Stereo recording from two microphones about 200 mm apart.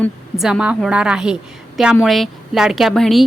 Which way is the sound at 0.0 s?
Centre (ahead or behind).